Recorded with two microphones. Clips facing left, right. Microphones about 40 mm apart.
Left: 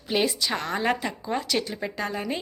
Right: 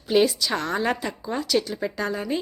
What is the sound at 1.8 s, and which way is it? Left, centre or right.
Speech, centre.